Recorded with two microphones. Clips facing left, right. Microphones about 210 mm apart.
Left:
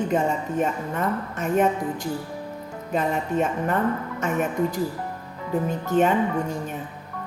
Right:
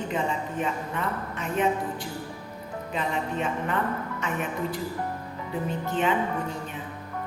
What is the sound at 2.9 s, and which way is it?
A woman's voice, 45° left (ahead or behind).